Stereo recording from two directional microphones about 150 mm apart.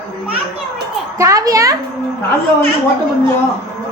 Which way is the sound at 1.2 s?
20° right (ahead or behind).